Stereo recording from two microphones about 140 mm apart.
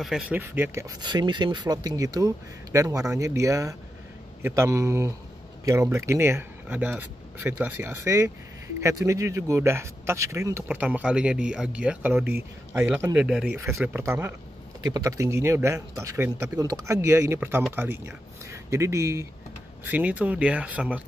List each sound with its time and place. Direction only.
0.0 s speech: centre (ahead or behind)
0.4 s speech: 20° right (ahead or behind)
1.1 s speech: 30° right (ahead or behind)
13.1 s speech: 5° right (ahead or behind)
13.6 s speech: 20° right (ahead or behind)
19.8 s speech: 10° right (ahead or behind)